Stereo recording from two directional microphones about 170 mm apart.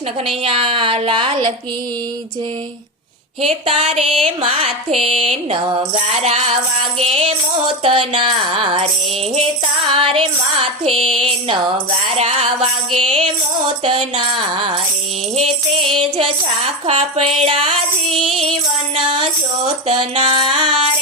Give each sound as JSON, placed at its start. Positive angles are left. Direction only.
{"t": 0.4, "sound": "music", "side_deg": -35}
{"t": 3.4, "sound": "music", "side_deg": -35}
{"t": 9.9, "sound": "music", "side_deg": -30}
{"t": 13.8, "sound": "music", "side_deg": -30}
{"t": 16.0, "sound": "music", "side_deg": -30}